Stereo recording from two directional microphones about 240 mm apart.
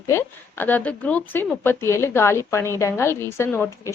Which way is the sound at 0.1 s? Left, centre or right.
Centre.